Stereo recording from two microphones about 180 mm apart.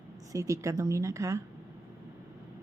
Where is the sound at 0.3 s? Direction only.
15° right (ahead or behind).